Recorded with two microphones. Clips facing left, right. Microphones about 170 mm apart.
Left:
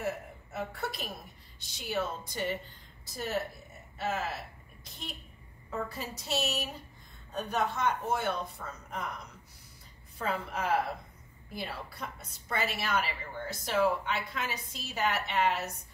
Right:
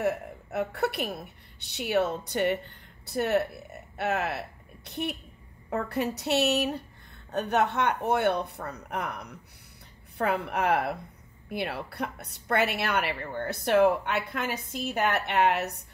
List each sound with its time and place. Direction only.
0.0 s a woman's voice: 65° right (ahead or behind)